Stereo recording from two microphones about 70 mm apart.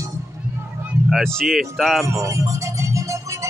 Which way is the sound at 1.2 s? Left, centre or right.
Centre.